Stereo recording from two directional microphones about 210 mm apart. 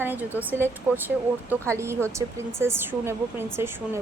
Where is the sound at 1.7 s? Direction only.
10° right (ahead or behind).